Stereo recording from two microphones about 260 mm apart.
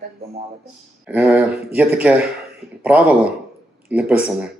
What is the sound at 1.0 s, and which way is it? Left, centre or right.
Speech, centre.